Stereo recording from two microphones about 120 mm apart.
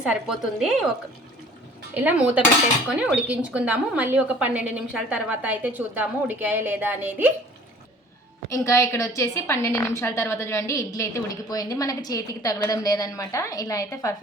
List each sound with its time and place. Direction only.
0.0 s a woman's voice: 5° right (ahead or behind)
1.9 s a woman's voice: 15° right (ahead or behind)
8.4 s a woman's voice: 25° left (ahead or behind)